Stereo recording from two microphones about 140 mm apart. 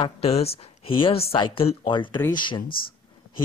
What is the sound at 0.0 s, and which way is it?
Speech, 45° left (ahead or behind).